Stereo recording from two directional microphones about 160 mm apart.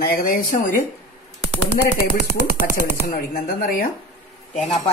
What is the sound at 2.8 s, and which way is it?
Chopping, 70° right (ahead or behind).